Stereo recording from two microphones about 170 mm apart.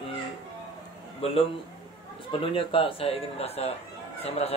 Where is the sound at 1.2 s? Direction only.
35° left (ahead or behind).